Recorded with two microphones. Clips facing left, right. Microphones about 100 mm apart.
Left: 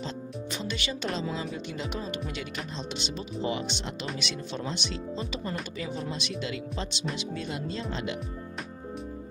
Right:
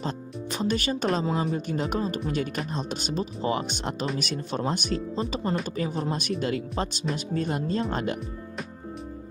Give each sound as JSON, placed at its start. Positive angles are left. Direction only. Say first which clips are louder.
{"t": 0.0, "sound": "music", "louder": "right 3 dB", "side_deg": -45}
{"t": 1.4, "sound": "speech", "louder": "right 7 dB", "side_deg": -40}